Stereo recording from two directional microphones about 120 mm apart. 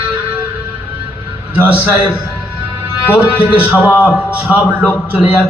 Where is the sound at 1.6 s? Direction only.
15° right (ahead or behind).